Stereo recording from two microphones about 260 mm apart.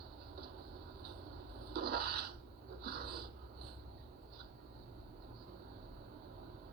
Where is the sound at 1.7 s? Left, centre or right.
Right.